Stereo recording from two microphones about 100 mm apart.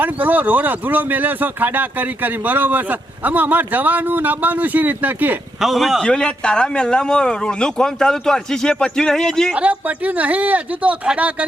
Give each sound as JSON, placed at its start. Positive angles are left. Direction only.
{"t": 0.0, "sound": "speech", "side_deg": -15}
{"t": 5.5, "sound": "a man's voice", "side_deg": 0}
{"t": 6.1, "sound": "speech", "side_deg": 10}
{"t": 9.5, "sound": "speech", "side_deg": -15}